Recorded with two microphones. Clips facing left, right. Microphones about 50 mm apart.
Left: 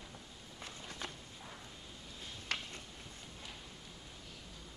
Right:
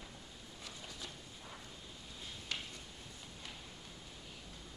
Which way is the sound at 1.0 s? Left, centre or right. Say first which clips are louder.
Left 6 dB; left.